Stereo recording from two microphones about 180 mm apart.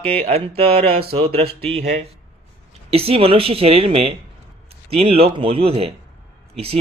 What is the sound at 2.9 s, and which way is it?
Speech, 30° right (ahead or behind).